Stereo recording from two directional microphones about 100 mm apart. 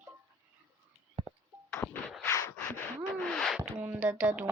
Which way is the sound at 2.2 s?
25° left (ahead or behind).